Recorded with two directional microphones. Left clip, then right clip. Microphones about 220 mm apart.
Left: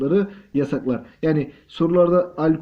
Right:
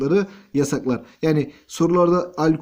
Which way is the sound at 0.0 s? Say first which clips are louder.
Even; 50° right (ahead or behind).